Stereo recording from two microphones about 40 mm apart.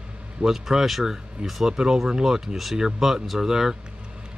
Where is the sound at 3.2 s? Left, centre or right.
Centre.